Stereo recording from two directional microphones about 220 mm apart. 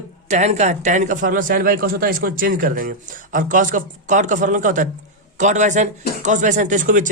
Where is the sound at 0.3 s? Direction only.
30° right (ahead or behind).